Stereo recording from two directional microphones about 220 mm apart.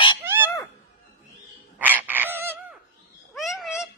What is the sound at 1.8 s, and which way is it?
Frog, 10° right (ahead or behind).